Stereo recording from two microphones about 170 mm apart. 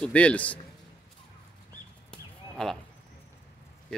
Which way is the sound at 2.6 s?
5° left (ahead or behind).